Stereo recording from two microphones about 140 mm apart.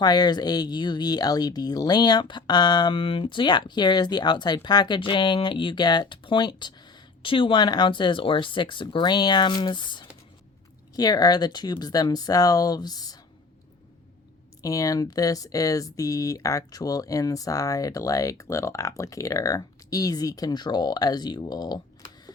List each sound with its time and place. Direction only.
0.0 s speech: 30° left (ahead or behind)
14.6 s speech: 25° left (ahead or behind)